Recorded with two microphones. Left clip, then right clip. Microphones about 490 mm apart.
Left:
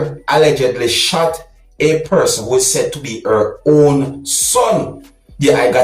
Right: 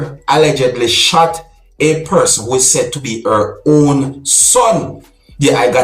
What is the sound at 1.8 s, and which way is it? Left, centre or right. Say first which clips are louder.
Speech: right 1 dB; left.